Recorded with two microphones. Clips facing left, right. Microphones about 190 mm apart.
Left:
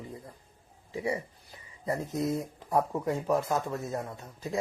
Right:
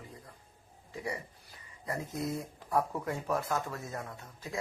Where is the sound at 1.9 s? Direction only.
25° left (ahead or behind).